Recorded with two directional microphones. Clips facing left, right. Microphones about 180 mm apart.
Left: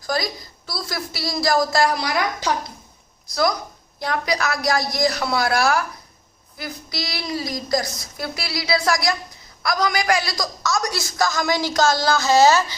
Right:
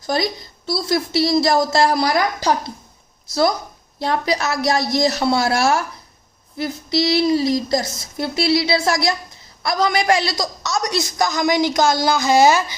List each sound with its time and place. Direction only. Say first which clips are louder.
0.0 s a woman's voice: right 4 dB; 25° right (ahead or behind)
2.0 s a woman's voice: right 5 dB; 35° right (ahead or behind)
4.0 s a woman's voice: right 3 dB; 25° right (ahead or behind)